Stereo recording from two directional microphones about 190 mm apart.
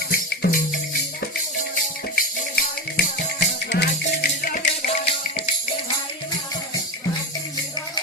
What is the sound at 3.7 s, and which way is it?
Music, 55° left (ahead or behind).